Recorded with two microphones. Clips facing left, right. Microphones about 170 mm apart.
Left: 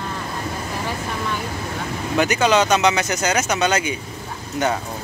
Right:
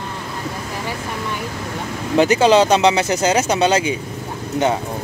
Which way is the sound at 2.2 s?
30° right (ahead or behind).